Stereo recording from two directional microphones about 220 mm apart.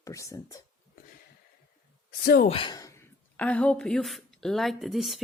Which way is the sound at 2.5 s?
20° left (ahead or behind).